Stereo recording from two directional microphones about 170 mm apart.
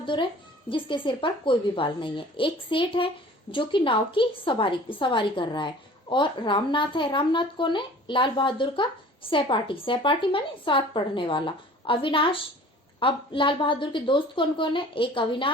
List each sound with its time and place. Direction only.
0.0 s a woman's voice: 30° left (ahead or behind)